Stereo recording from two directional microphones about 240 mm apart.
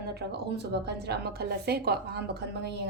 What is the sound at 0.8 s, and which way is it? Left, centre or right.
A woman's voice, right.